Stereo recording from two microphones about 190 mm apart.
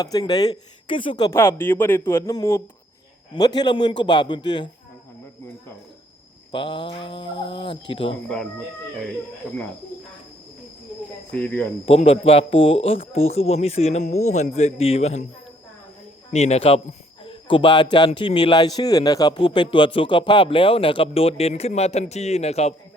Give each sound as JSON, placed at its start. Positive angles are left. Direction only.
{"t": 0.0, "sound": "a man's voice", "side_deg": 20}
{"t": 6.5, "sound": "a man's voice", "side_deg": 25}
{"t": 11.3, "sound": "speech", "side_deg": 10}
{"t": 11.9, "sound": "speech", "side_deg": 30}
{"t": 16.3, "sound": "a man's voice", "side_deg": 35}